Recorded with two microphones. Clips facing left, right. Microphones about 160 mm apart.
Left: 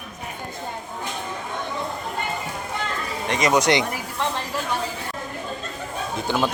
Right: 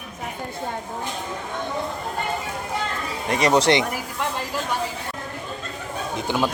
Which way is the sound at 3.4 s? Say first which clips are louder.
Right 1 dB; 30° right (ahead or behind).